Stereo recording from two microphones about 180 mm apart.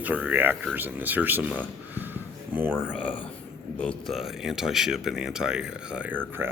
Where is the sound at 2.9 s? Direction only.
5° left (ahead or behind).